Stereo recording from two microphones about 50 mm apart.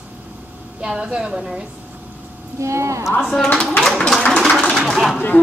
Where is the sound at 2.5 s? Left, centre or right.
Right.